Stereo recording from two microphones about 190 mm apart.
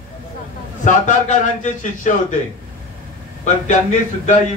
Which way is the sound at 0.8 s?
40° left (ahead or behind).